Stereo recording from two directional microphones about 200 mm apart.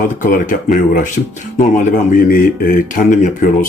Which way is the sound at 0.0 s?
45° left (ahead or behind).